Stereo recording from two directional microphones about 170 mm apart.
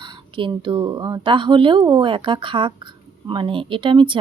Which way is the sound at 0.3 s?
30° right (ahead or behind).